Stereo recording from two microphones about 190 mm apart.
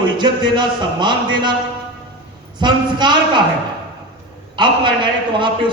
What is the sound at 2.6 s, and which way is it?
Speech, 25° right (ahead or behind).